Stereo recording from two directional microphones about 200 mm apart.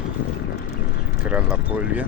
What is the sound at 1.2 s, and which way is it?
Speech, 5° right (ahead or behind).